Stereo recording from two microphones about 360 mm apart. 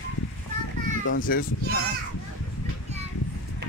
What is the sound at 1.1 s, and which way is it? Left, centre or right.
Speech, left.